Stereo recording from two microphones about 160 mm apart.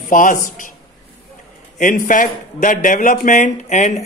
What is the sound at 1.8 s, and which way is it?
A man's voice, 55° left (ahead or behind).